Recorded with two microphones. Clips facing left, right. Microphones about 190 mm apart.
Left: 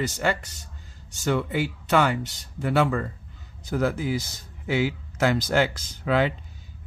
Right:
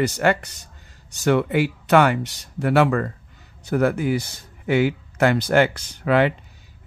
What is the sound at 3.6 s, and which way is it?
Speech, 65° right (ahead or behind).